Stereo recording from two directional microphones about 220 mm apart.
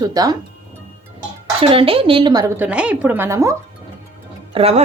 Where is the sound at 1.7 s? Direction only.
25° right (ahead or behind).